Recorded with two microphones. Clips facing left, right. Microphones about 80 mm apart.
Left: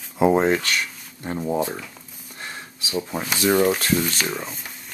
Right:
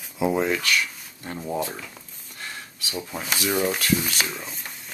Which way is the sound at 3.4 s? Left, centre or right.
Left.